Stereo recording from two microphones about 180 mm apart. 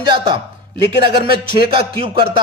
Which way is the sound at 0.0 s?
25° right (ahead or behind).